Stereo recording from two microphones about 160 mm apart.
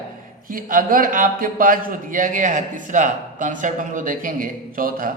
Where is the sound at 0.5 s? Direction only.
60° right (ahead or behind).